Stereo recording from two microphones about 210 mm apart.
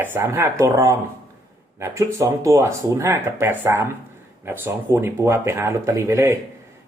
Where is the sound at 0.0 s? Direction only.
10° right (ahead or behind).